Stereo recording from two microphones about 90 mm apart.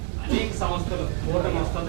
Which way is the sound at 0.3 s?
15° right (ahead or behind).